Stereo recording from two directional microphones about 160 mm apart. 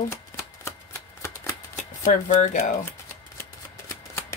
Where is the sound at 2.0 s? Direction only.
50° left (ahead or behind).